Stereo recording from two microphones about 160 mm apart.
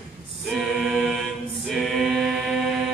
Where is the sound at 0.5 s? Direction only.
Centre (ahead or behind).